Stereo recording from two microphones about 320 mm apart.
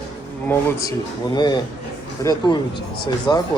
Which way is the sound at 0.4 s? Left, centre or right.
Centre.